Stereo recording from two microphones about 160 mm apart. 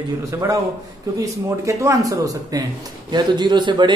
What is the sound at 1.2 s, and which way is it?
Speech, 20° right (ahead or behind).